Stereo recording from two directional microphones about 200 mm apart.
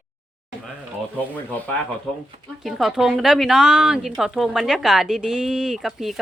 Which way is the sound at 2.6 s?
Centre (ahead or behind).